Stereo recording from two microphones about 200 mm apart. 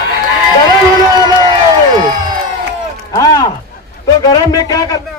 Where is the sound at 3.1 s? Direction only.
20° left (ahead or behind).